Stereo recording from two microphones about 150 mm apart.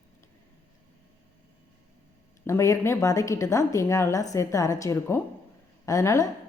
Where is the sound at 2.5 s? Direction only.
20° left (ahead or behind).